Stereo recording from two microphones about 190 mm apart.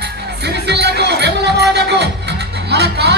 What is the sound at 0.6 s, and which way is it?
Music, 60° right (ahead or behind).